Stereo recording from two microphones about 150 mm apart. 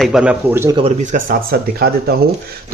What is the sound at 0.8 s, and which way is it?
Speech, 55° right (ahead or behind).